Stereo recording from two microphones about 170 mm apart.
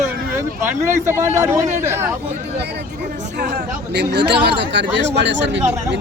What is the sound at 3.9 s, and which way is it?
Speech, 80° right.